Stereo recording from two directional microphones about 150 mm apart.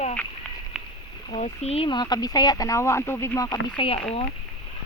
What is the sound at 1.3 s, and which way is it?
Speech, 45° left (ahead or behind).